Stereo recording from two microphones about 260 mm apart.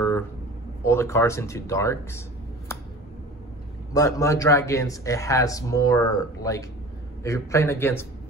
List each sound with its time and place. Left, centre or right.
0.8 s speech: centre
3.9 s speech: centre